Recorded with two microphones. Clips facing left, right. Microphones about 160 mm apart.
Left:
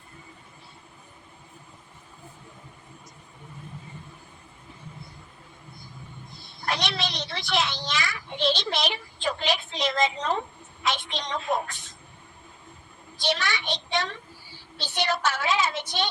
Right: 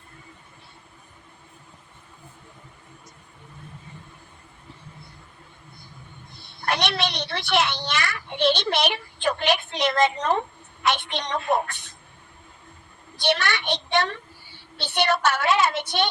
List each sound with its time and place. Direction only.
6.3 s a child's voice: 65° right (ahead or behind)
13.1 s a child's voice: 65° right (ahead or behind)